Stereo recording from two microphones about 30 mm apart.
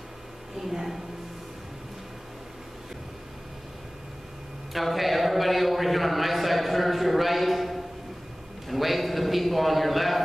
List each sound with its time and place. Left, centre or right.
0.6 s speech: centre
4.7 s a man's voice: centre